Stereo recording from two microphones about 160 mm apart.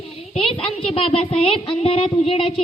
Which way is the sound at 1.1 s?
35° left (ahead or behind).